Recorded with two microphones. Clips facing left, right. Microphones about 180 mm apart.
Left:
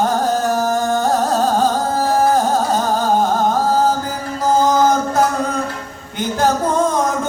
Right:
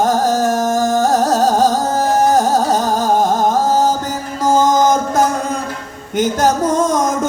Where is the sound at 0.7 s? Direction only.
40° right (ahead or behind).